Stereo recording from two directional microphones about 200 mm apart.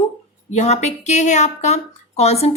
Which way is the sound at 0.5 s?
35° left (ahead or behind).